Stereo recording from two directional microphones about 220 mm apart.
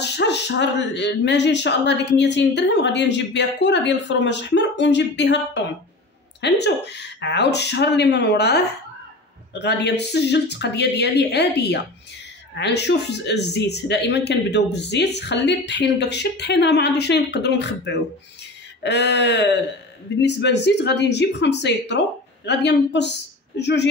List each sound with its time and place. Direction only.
0.0 s speech: 50° left (ahead or behind)